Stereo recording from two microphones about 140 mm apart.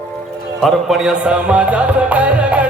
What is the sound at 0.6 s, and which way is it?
Music, centre (ahead or behind).